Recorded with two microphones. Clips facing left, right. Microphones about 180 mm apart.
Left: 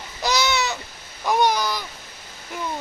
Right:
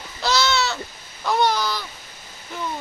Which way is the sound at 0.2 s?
15° left (ahead or behind).